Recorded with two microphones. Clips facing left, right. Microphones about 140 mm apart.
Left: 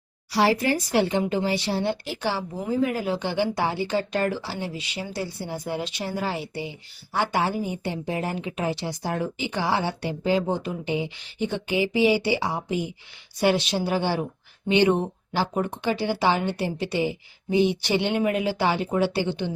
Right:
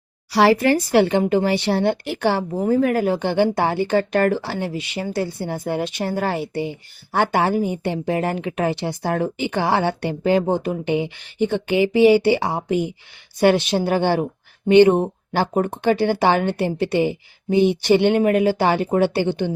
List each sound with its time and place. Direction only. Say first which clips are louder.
0.3 s speech: right 6 dB; 65° right (ahead or behind)